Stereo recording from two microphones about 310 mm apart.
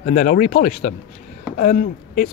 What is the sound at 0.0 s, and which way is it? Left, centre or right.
Speech, left.